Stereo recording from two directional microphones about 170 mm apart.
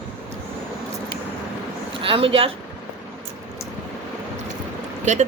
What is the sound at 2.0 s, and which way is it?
Speech, 30° right (ahead or behind).